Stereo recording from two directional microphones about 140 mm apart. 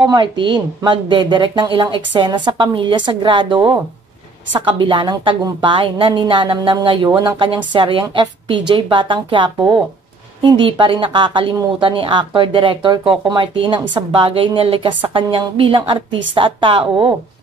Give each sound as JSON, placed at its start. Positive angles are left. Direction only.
{"t": 0.0, "sound": "speech", "side_deg": -30}